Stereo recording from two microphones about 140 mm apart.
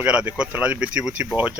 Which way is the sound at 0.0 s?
10° right (ahead or behind).